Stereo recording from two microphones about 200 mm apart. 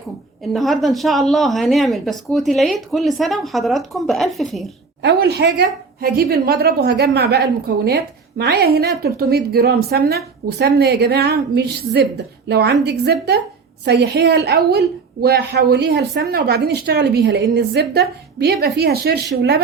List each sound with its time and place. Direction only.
0.5 s speech: centre (ahead or behind)
5.0 s a woman's voice: 55° right (ahead or behind)